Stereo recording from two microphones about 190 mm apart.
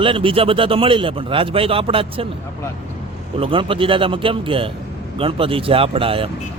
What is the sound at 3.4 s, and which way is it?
Speech, 30° right (ahead or behind).